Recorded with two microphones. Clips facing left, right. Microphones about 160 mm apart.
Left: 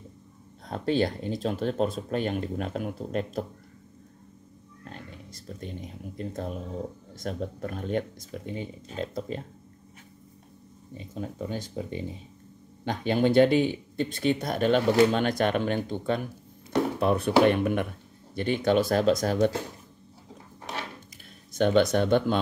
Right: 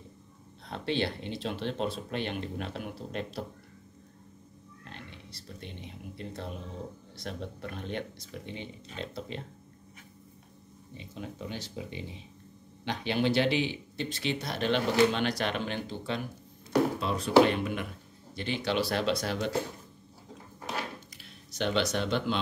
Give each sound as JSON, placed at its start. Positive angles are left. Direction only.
{"t": 0.7, "sound": "speech", "side_deg": 45}
{"t": 4.8, "sound": "speech", "side_deg": 45}
{"t": 11.0, "sound": "speech", "side_deg": 40}
{"t": 21.5, "sound": "speech", "side_deg": 50}